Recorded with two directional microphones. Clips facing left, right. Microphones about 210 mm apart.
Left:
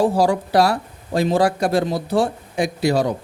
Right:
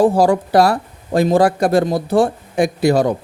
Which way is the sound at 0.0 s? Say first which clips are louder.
Right 4 dB; 50° right (ahead or behind).